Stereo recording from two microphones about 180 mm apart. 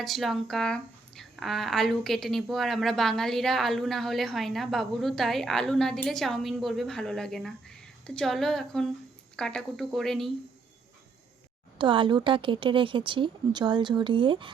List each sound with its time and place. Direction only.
0.0 s speech: centre (ahead or behind)
11.8 s speech: 25° right (ahead or behind)